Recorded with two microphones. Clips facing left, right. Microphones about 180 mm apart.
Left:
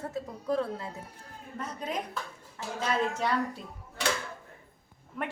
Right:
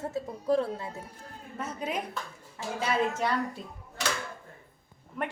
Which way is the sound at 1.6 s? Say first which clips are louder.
Right 2 dB; 5° right (ahead or behind).